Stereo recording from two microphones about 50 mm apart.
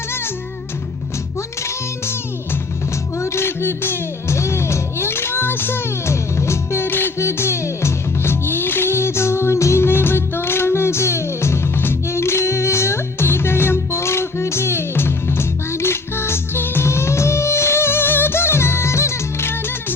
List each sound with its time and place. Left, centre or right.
3.2 s music: left
4.4 s music: left
6.1 s music: left
7.2 s music: left
9.8 s music: left
16.8 s music: left